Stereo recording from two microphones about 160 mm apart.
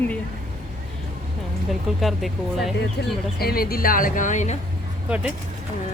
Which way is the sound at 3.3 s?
70° left (ahead or behind).